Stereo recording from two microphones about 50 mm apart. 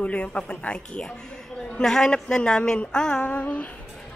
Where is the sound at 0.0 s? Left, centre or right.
Left.